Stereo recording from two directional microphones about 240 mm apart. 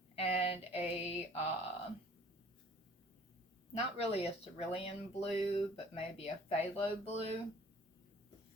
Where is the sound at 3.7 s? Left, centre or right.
Left.